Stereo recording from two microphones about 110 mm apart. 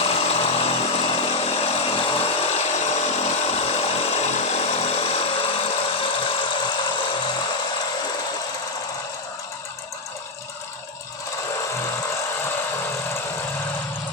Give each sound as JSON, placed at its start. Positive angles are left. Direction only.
{"t": 0.0, "sound": "chainsaw", "side_deg": 65}
{"t": 2.5, "sound": "chainsaw", "side_deg": 85}
{"t": 6.1, "sound": "a sound", "side_deg": 50}